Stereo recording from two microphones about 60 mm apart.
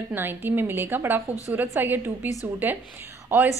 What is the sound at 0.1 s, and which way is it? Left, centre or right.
A woman's voice, right.